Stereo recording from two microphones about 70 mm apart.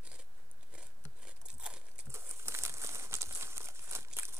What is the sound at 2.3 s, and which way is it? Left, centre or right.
Crumpling, right.